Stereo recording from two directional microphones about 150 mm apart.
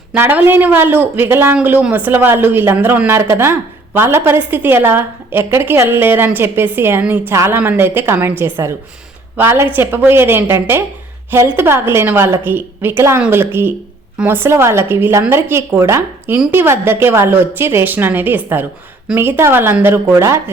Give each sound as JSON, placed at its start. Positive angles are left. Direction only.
{"t": 0.1, "sound": "speech", "side_deg": -10}